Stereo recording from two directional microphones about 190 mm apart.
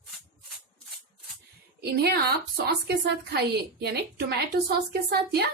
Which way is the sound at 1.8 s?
60° right (ahead or behind).